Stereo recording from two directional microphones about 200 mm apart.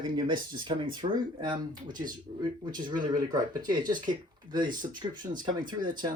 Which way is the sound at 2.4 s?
20° right (ahead or behind).